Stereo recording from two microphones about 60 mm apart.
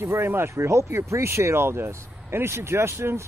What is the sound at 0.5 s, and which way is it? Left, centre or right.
Speech, right.